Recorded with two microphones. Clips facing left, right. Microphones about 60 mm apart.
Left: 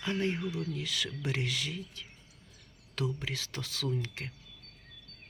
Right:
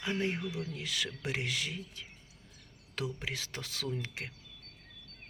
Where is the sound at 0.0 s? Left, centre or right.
Centre.